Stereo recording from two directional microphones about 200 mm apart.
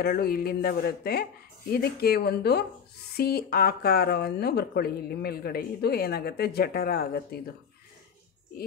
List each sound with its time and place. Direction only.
0.0 s speech: 50° left (ahead or behind)